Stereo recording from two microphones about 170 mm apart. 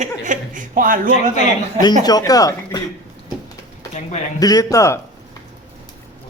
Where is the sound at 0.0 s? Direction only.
50° right (ahead or behind).